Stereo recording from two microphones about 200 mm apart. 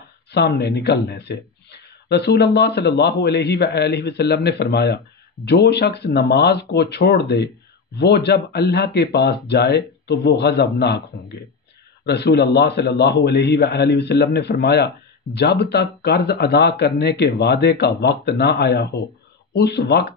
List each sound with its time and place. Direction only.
0.3 s speech: 55° left (ahead or behind)
12.1 s speech: 55° left (ahead or behind)